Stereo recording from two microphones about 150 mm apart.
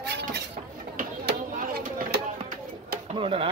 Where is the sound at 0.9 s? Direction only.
75° right (ahead or behind).